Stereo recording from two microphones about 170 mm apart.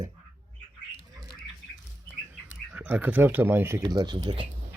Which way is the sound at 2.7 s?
10° right (ahead or behind).